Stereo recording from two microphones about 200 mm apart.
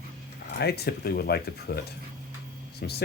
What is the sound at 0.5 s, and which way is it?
Speech, 55° left (ahead or behind).